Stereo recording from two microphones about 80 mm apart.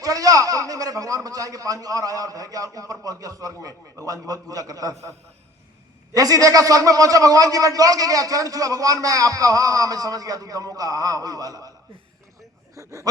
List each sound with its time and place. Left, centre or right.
0.0 s a man's voice: right
6.1 s a man's voice: right
12.7 s speech: right